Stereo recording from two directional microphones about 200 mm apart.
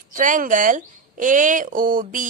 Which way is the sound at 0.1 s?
40° right (ahead or behind).